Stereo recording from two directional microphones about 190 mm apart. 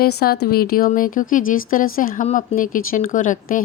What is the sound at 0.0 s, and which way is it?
Speech, 55° left (ahead or behind).